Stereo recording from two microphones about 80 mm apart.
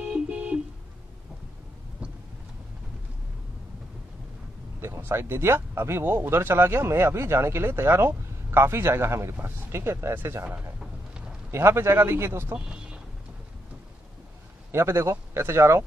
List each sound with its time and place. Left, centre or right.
0.0 s a sound: centre
4.8 s speech: right
12.5 s vehicle: centre
14.7 s speech: right